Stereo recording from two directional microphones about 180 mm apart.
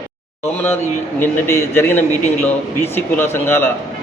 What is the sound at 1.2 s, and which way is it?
A man's voice, 15° left (ahead or behind).